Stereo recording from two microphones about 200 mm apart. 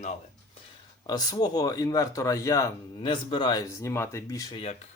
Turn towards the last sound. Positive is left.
turn(degrees=15)  # may be behind; listen again after turning